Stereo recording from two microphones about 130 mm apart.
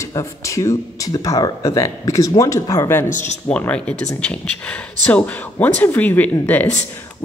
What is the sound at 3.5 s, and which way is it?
A woman's voice, 10° left (ahead or behind).